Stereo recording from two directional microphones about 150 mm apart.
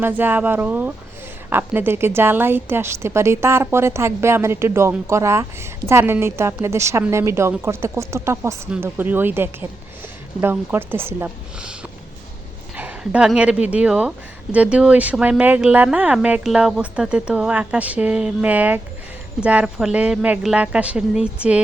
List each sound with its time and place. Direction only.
0.0 s a woman's voice: 15° right (ahead or behind)
12.7 s a woman's voice: 10° right (ahead or behind)